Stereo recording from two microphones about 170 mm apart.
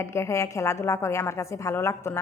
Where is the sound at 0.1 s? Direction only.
15° left (ahead or behind).